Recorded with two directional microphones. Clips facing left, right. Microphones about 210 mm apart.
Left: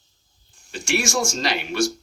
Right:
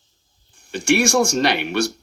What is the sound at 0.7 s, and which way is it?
Speech, 60° right (ahead or behind).